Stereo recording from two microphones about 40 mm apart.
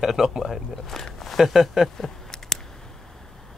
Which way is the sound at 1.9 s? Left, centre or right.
Centre.